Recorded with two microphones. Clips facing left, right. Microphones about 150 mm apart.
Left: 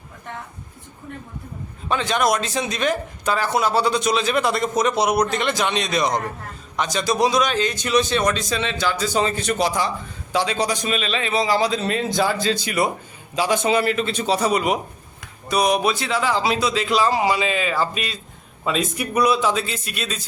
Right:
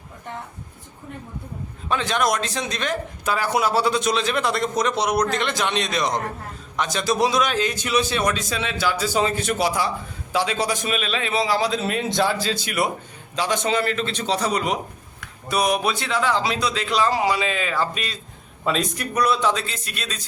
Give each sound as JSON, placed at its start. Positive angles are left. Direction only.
{"t": 1.9, "sound": "a man's voice", "side_deg": 0}
{"t": 3.2, "sound": "a man's voice", "side_deg": -10}